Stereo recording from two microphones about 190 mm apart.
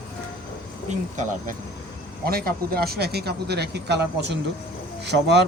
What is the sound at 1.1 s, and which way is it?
Speech, 40° right (ahead or behind).